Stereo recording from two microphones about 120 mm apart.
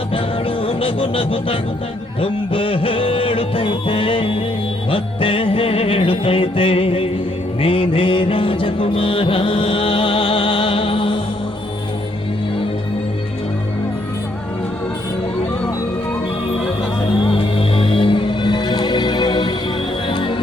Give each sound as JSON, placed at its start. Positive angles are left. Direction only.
{"t": 0.1, "sound": "music", "side_deg": 45}
{"t": 17.3, "sound": "music", "side_deg": 45}